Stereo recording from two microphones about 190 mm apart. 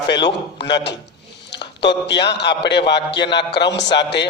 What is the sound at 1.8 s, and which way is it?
A man's voice, 65° left (ahead or behind).